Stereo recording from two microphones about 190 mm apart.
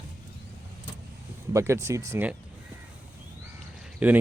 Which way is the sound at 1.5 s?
15° right (ahead or behind).